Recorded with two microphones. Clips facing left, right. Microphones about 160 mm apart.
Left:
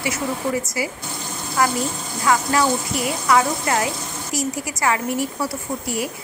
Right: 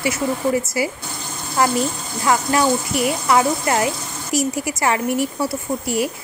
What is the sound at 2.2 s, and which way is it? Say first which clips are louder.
Speech: right 1 dB; 25° right (ahead or behind).